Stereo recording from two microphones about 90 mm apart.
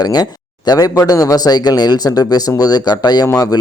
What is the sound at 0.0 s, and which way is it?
A man's voice, 50° left (ahead or behind).